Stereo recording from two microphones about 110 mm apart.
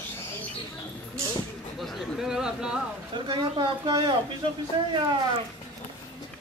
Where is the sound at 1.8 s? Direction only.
5° right (ahead or behind).